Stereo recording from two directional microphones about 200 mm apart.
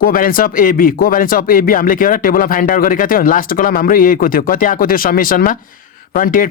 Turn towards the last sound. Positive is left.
turn(degrees=45)  # may be behind; listen again after turning